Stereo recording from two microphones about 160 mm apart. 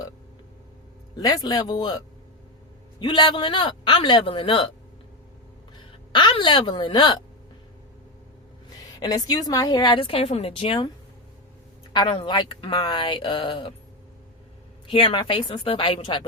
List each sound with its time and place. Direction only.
1.1 s a woman's voice: 25° left (ahead or behind)
3.0 s speech: 30° left (ahead or behind)
5.7 s speech: 30° left (ahead or behind)
9.0 s a woman's voice: 25° left (ahead or behind)
11.9 s speech: 30° left (ahead or behind)
14.8 s speech: 35° left (ahead or behind)